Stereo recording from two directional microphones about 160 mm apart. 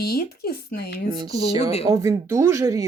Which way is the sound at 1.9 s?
20° right (ahead or behind).